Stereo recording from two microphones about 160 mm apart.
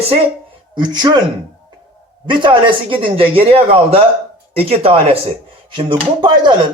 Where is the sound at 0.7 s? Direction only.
30° right (ahead or behind).